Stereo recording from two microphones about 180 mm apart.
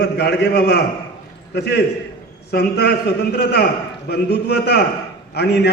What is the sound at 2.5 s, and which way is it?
Speech, 60° left (ahead or behind).